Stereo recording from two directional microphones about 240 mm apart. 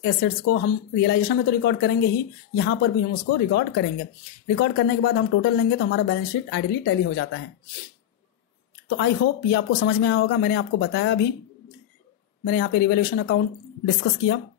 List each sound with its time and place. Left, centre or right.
0.5 s speech: left
8.8 s speech: left
12.4 s speech: left